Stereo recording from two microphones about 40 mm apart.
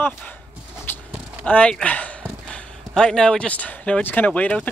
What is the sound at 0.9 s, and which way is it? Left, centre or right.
Livestock, left.